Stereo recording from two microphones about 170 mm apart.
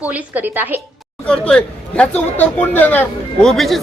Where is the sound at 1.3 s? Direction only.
5° left (ahead or behind).